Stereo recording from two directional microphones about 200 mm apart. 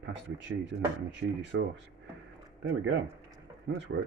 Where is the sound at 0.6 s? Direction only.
60° right (ahead or behind).